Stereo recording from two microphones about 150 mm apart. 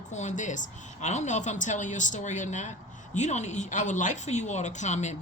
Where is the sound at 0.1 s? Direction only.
50° left (ahead or behind).